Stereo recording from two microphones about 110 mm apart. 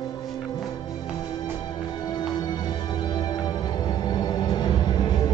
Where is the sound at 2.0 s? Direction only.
40° left (ahead or behind).